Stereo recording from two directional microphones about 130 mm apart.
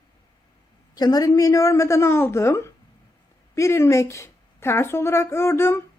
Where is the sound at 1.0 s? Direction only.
30° left (ahead or behind).